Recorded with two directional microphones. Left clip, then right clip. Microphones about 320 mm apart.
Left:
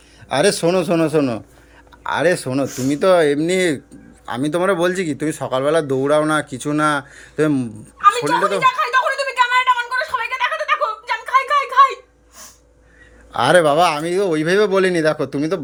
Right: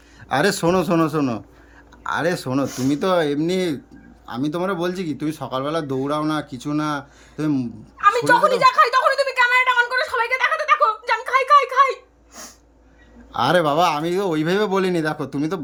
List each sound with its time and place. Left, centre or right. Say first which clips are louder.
0.3 s a man's voice: left 3 dB; centre
8.1 s speech: right 2 dB; centre
9.1 s a sound: even; centre
13.3 s speech: left 4 dB; centre